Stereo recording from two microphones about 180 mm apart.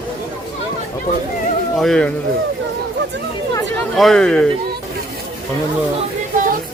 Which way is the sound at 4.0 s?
Centre (ahead or behind).